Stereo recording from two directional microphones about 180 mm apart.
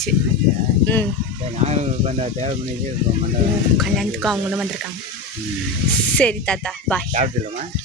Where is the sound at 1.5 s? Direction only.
40° right (ahead or behind).